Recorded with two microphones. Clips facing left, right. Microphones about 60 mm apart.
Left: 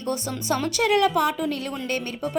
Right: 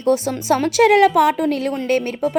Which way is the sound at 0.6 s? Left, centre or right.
Right.